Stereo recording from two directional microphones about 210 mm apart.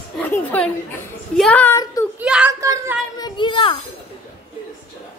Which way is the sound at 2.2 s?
5° right (ahead or behind).